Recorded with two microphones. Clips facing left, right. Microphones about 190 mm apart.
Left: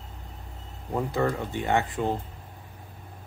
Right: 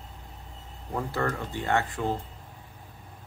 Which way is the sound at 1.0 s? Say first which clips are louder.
Left 3 dB; 20° left (ahead or behind).